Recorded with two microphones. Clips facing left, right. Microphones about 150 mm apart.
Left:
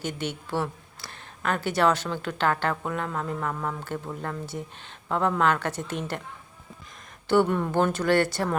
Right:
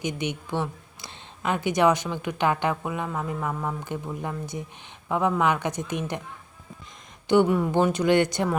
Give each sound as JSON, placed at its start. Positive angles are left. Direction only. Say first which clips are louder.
{"t": 0.0, "sound": "speech", "louder": "right 2 dB", "side_deg": -15}
{"t": 7.3, "sound": "speech", "louder": "right 2 dB", "side_deg": -15}